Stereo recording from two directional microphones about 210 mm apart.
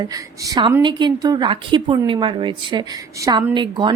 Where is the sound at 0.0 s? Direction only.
15° right (ahead or behind).